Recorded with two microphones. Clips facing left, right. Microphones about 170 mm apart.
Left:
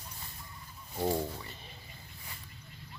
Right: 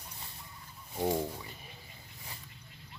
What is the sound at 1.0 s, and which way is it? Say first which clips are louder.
Speech: even; 10° right (ahead or behind).